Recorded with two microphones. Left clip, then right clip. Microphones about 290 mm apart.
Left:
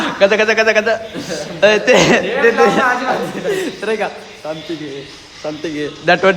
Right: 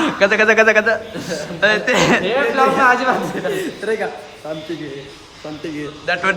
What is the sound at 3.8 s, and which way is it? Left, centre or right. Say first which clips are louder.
Speech: left 2 dB; centre.